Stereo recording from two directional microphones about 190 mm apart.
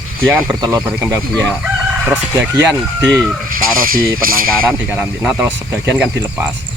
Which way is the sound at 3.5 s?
50° right (ahead or behind).